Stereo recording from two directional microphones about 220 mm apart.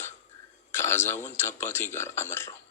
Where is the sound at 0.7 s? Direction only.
10° left (ahead or behind).